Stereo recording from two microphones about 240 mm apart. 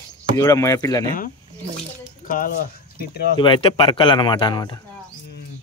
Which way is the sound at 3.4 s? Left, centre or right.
Left.